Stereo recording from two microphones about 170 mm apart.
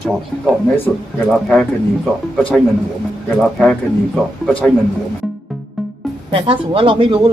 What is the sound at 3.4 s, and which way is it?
Speech, 5° left (ahead or behind).